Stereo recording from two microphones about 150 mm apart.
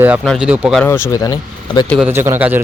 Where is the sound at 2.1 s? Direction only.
15° right (ahead or behind).